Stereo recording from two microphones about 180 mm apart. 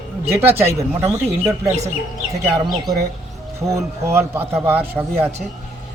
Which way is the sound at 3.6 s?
15° right (ahead or behind).